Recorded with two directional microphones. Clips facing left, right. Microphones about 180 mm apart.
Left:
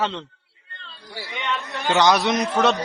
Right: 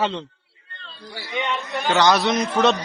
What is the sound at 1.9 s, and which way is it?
Speech, 15° left (ahead or behind).